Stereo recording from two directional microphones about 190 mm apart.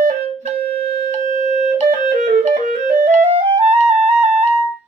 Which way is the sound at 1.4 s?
40° right (ahead or behind).